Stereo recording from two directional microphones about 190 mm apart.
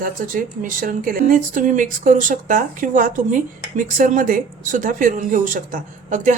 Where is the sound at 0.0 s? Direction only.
45° right (ahead or behind).